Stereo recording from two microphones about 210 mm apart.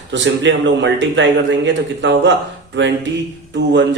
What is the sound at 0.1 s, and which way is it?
A man's voice, 60° right (ahead or behind).